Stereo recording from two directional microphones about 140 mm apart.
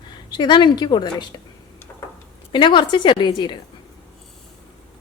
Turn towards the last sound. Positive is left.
turn(degrees=35)  # may be behind; listen again after turning